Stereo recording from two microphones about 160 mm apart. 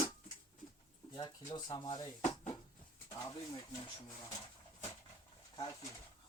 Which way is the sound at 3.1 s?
25° left (ahead or behind).